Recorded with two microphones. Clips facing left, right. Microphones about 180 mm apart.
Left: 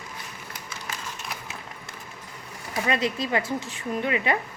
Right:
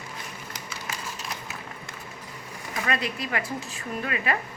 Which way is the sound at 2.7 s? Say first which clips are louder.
Left 4 dB; 25° left (ahead or behind).